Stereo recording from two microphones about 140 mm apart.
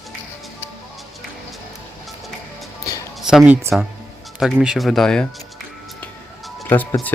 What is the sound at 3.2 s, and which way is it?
Speech, 5° right (ahead or behind).